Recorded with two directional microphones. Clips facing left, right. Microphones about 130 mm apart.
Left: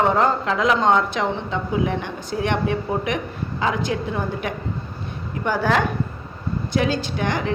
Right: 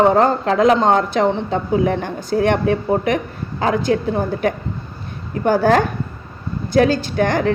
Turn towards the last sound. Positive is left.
turn(degrees=-45)  # may be behind; listen again after turning